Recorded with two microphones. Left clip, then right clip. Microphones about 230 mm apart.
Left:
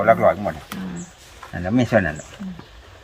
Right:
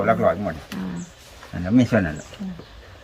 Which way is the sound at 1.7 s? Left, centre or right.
Centre.